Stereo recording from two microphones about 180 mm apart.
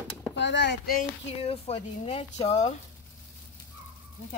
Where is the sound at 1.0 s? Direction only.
35° left (ahead or behind).